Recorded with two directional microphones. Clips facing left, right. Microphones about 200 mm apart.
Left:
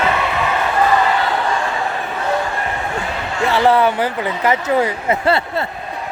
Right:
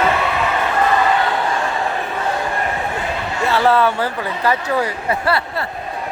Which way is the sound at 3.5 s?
15° left (ahead or behind).